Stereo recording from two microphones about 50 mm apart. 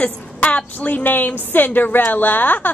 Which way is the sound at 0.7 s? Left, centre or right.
Left.